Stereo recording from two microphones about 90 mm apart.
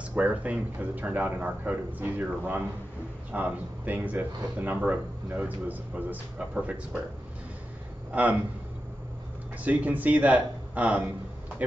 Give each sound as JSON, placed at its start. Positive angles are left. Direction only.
{"t": 0.1, "sound": "speech", "side_deg": -15}
{"t": 8.1, "sound": "a man's voice", "side_deg": -15}
{"t": 9.7, "sound": "a man's voice", "side_deg": -20}